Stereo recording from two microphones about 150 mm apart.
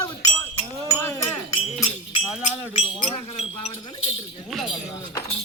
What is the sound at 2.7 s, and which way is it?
Wind chime, 45° left (ahead or behind).